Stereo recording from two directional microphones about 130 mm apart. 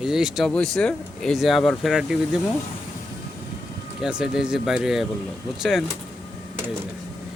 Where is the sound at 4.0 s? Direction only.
5° right (ahead or behind).